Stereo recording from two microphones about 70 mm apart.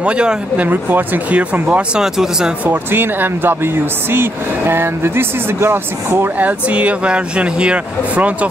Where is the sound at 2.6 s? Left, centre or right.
Right.